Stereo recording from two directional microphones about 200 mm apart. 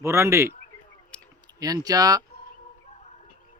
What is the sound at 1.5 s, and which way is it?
Speech, 20° right (ahead or behind).